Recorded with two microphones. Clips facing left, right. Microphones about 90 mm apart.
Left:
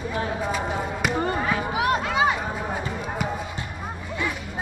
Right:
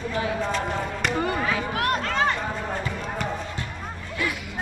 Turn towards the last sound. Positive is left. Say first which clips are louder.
# left 1 dB
turn(degrees=10)  # may be behind; listen again after turning